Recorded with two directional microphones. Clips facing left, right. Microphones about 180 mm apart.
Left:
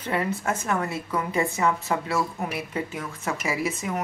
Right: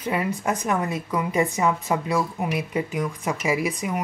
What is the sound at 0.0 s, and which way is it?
A woman's voice, 15° right (ahead or behind).